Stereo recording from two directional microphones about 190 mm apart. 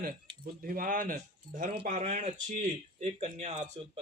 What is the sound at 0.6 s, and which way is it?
Speech, 50° right (ahead or behind).